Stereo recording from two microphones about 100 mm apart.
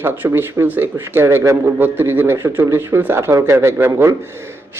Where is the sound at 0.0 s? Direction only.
20° right (ahead or behind).